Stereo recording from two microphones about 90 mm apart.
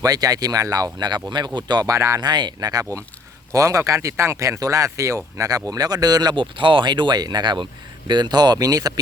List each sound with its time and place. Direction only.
0.0 s speech: 45° right (ahead or behind)
2.0 s speech: 35° right (ahead or behind)
2.2 s speech: 55° right (ahead or behind)
6.3 s speech: 65° right (ahead or behind); by 8.9 s 40° right (ahead or behind)